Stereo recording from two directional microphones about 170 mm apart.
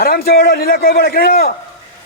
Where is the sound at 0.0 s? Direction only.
60° left (ahead or behind).